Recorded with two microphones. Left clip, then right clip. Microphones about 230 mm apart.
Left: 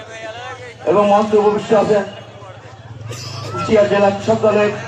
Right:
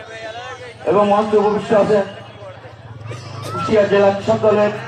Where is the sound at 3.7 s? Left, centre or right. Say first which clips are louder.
Left 1 dB; left.